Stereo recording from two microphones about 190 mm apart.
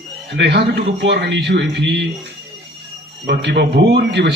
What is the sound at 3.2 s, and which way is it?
Speech, 60° right (ahead or behind).